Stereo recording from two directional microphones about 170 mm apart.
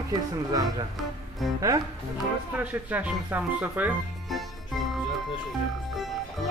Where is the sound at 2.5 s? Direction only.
10° right (ahead or behind).